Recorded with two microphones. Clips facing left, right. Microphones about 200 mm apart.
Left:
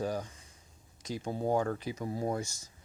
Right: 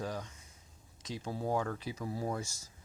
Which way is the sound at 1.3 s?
25° left (ahead or behind).